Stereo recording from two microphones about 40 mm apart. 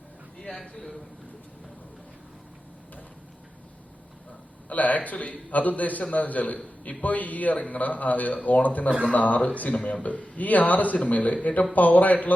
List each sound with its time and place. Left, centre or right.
0.4 s a man's voice: left
4.7 s a man's voice: left